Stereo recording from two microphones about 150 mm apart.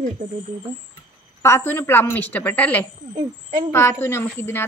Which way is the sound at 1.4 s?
15° left (ahead or behind).